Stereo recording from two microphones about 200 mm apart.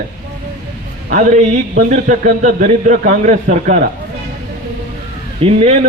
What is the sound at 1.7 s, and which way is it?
A man's voice, 40° right (ahead or behind).